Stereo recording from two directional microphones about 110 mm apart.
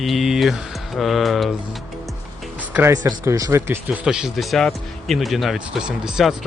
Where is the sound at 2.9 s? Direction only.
30° right (ahead or behind).